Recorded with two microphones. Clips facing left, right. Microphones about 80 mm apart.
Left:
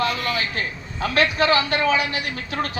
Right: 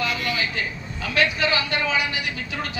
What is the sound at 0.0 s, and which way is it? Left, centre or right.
A man's voice, left.